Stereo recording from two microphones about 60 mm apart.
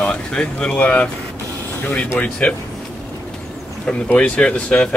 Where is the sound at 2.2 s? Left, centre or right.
Centre.